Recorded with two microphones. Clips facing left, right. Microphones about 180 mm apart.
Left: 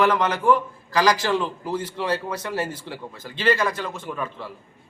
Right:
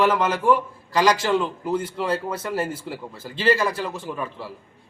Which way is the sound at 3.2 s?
30° right (ahead or behind).